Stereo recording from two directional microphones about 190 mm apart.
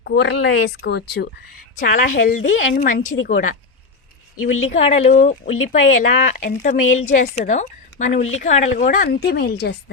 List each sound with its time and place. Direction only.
0.0 s speech: 60° left (ahead or behind)
1.7 s a woman's voice: 45° left (ahead or behind)
4.4 s speech: 90° left
4.7 s a woman's voice: 35° left (ahead or behind); by 9.7 s 55° left (ahead or behind)